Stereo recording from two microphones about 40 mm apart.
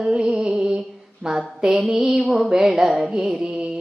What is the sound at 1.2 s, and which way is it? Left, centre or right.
Mantra, centre.